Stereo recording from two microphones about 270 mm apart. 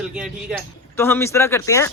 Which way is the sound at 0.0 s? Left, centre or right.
Centre.